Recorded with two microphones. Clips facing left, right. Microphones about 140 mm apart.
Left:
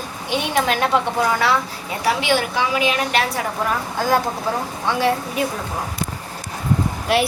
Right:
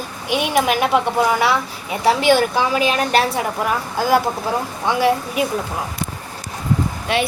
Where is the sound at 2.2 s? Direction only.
40° right (ahead or behind).